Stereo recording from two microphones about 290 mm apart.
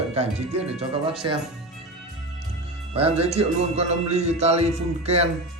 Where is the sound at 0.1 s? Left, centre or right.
Right.